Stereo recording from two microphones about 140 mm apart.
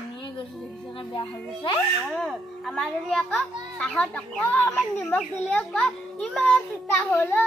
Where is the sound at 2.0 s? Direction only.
Centre (ahead or behind).